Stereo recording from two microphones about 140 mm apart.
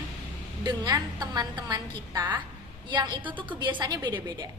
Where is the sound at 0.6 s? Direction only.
30° right (ahead or behind).